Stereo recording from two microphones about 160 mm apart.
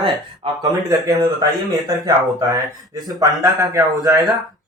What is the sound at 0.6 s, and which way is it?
Speech, 20° right (ahead or behind).